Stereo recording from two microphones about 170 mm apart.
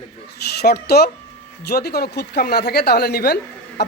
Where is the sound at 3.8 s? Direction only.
75° left (ahead or behind).